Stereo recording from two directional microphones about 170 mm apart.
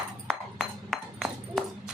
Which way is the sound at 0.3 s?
Centre (ahead or behind).